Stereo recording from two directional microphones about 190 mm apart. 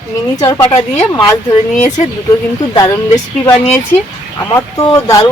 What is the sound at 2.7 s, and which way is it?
Speech, 20° left (ahead or behind).